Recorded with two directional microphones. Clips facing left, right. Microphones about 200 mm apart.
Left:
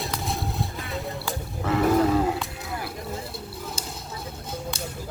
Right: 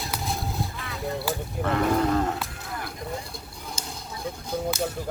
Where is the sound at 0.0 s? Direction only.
Centre (ahead or behind).